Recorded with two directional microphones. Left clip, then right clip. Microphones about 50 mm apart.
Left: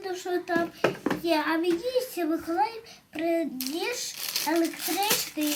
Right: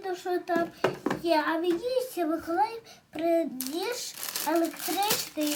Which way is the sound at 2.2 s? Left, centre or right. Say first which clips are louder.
Even; centre.